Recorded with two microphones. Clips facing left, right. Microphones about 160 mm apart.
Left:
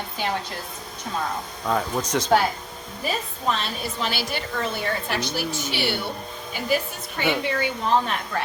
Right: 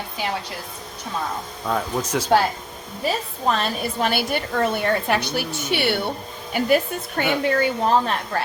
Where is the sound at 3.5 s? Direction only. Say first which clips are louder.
Right 4 dB; 50° right (ahead or behind).